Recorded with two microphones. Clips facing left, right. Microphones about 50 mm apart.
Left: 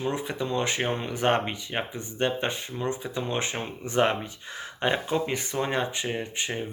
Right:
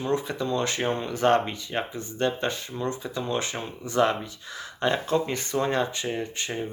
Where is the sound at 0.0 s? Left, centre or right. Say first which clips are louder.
Right 2 dB; left.